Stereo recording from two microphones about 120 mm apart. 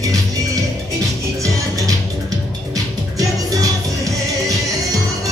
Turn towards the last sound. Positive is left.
turn(degrees=-30)  # may be behind; listen again after turning